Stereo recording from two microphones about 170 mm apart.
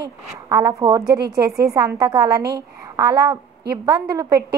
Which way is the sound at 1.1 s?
70° right (ahead or behind).